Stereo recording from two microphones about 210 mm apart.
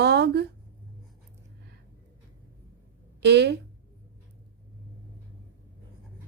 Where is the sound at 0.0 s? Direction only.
50° right (ahead or behind).